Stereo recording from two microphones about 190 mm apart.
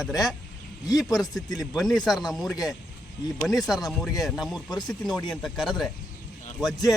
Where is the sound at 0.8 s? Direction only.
20° left (ahead or behind).